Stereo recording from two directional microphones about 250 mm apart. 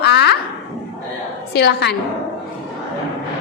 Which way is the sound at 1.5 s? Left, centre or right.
Left.